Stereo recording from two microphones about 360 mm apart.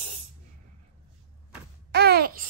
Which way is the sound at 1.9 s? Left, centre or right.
Right.